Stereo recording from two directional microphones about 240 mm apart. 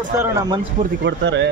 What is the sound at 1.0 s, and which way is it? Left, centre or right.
Speech, right.